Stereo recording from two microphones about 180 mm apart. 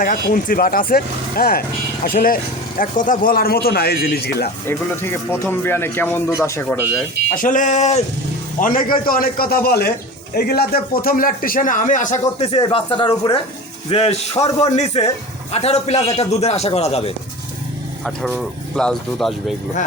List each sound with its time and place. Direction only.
0.0 s a man's voice: 50° left (ahead or behind)
4.6 s speech: 15° left (ahead or behind)
7.3 s speech: 45° left (ahead or behind)
8.6 s a man's voice: 50° left (ahead or behind)
12.6 s a man's voice: 25° left (ahead or behind)
18.0 s speech: centre (ahead or behind)